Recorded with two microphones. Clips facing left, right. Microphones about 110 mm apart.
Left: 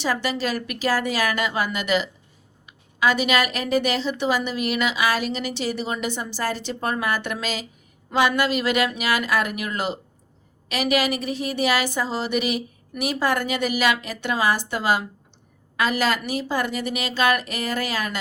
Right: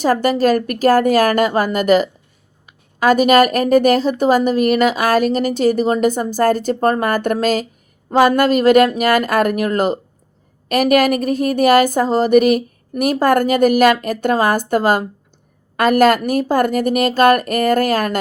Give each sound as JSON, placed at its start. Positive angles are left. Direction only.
{"t": 0.0, "sound": "a woman's voice", "side_deg": -45}